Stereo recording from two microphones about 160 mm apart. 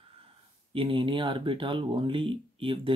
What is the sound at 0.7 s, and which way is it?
Speech, 30° right (ahead or behind).